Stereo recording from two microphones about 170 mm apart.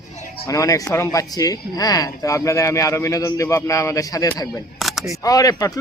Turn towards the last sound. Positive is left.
turn(degrees=20)  # may be behind; listen again after turning